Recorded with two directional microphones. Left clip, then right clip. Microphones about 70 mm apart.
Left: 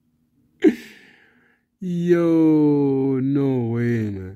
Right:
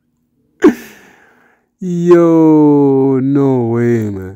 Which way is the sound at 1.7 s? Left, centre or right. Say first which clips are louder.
Right 11 dB; right.